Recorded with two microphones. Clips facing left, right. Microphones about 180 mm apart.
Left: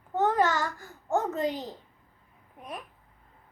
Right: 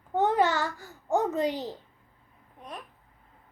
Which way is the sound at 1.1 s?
15° right (ahead or behind).